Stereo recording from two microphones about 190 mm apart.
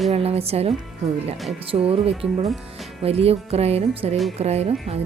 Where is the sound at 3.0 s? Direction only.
30° right (ahead or behind).